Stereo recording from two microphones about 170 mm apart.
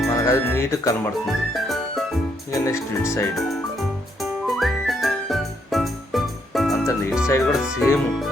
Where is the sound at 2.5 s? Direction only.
15° left (ahead or behind).